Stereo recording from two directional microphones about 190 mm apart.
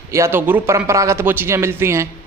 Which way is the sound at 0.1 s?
15° right (ahead or behind).